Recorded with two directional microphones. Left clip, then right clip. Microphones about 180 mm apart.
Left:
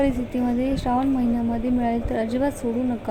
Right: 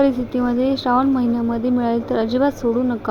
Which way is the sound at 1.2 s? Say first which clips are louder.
Right 4 dB; 15° left (ahead or behind).